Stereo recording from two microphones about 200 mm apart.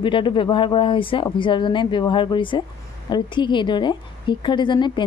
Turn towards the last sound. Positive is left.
turn(degrees=25)  # may be behind; listen again after turning